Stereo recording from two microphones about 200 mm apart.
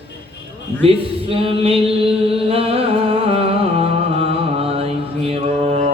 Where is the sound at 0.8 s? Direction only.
30° right (ahead or behind).